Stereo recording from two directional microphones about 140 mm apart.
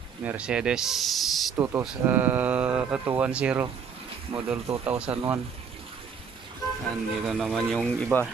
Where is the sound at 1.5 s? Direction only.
20° right (ahead or behind).